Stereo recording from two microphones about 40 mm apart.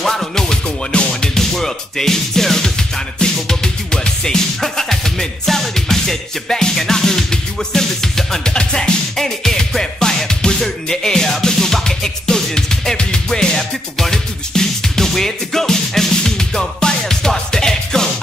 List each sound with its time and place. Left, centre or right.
0.0 s music: centre
8.5 s music: left
9.1 s music: centre